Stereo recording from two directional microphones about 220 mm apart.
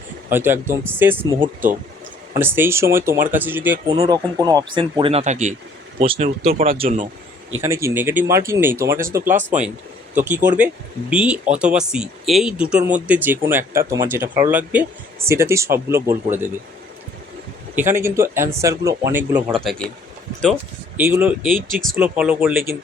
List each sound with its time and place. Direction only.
0.3 s speech: 10° right (ahead or behind); by 7.1 s 30° right (ahead or behind)
7.6 s speech: 10° right (ahead or behind)
17.7 s speech: 10° right (ahead or behind)
19.5 s speech: centre (ahead or behind)